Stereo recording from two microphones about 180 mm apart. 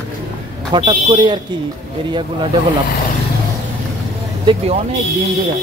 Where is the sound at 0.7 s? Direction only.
25° right (ahead or behind).